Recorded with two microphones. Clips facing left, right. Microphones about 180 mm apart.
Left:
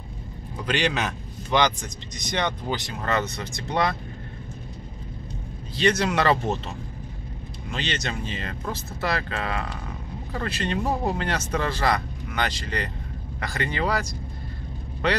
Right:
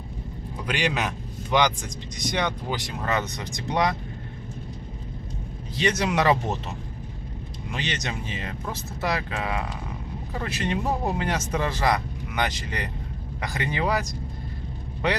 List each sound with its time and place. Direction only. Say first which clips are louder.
0.7 s a man's voice: left 1 dB; 10° right (ahead or behind)
5.8 s speech: left 2 dB; 15° right (ahead or behind)
7.7 s speech: left 1 dB; 15° right (ahead or behind)